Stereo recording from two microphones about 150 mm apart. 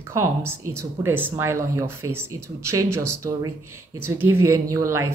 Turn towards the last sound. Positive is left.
turn(degrees=-20)  # may be behind; listen again after turning